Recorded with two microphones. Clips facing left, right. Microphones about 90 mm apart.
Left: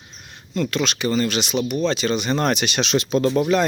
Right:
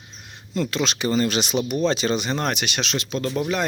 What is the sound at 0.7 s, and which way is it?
Speech, 25° right (ahead or behind).